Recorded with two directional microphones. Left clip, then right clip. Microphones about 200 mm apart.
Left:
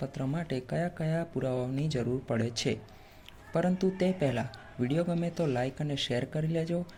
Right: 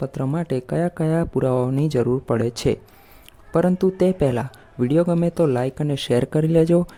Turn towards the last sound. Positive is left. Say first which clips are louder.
# right 16 dB
turn(degrees=-55)  # may be behind; listen again after turning